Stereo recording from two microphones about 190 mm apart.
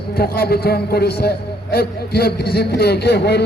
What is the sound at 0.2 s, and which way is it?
A man's voice, 55° left (ahead or behind).